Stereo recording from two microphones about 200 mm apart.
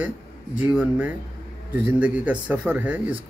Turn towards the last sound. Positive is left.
turn(degrees=-10)  # may be behind; listen again after turning